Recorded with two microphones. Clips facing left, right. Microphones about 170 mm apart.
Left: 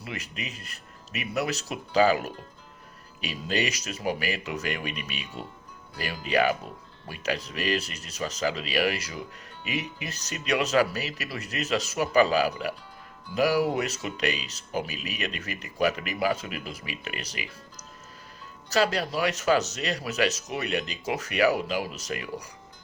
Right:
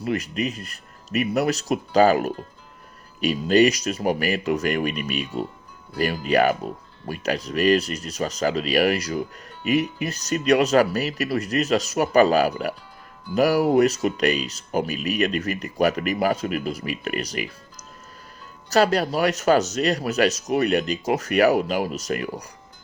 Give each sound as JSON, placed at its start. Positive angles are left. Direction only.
{"t": 0.0, "sound": "speech", "side_deg": -40}
{"t": 18.7, "sound": "speech", "side_deg": -40}